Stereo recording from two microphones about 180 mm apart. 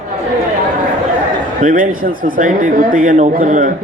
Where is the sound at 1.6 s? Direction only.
50° right (ahead or behind).